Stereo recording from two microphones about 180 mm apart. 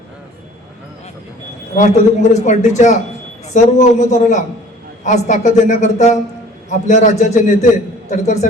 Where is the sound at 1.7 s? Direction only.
40° left (ahead or behind).